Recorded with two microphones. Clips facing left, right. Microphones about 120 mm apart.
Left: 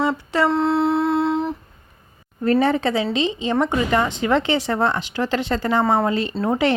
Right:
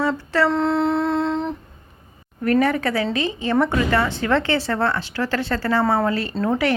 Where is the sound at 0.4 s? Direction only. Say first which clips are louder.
Left 1 dB; centre (ahead or behind).